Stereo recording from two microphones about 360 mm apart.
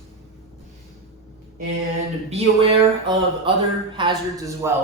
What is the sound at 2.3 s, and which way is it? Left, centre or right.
A man's voice, centre.